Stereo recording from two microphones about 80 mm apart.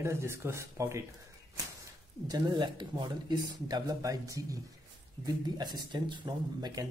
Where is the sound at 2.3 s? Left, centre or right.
Right.